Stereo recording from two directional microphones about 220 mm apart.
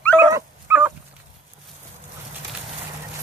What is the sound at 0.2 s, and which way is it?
Dog, 10° right (ahead or behind).